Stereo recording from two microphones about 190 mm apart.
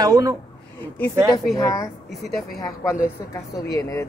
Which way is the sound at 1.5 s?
15° left (ahead or behind).